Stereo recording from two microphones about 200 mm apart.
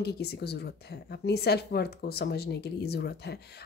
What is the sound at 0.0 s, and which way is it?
Speech, 55° left (ahead or behind).